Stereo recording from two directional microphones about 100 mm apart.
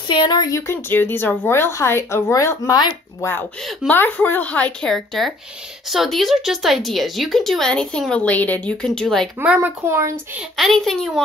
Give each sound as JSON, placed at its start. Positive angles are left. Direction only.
{"t": 0.1, "sound": "speech", "side_deg": 50}
{"t": 0.5, "sound": "a woman's voice", "side_deg": 30}
{"t": 3.2, "sound": "a woman's voice", "side_deg": 20}
{"t": 4.8, "sound": "speech", "side_deg": 0}
{"t": 9.6, "sound": "speech", "side_deg": -30}
{"t": 10.5, "sound": "speech", "side_deg": 0}